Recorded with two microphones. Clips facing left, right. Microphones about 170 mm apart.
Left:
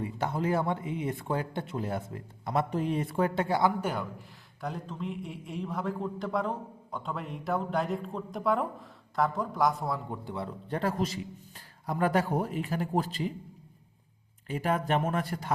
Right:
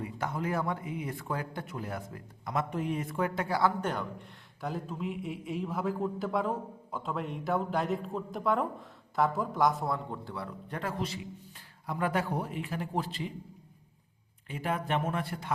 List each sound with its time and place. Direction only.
0.0 s speech: 30° left (ahead or behind)
3.6 s a man's voice: 10° left (ahead or behind)
4.6 s a man's voice: 5° right (ahead or behind)
10.1 s a man's voice: 20° left (ahead or behind); by 13.2 s 40° left (ahead or behind)
14.4 s a man's voice: 40° left (ahead or behind)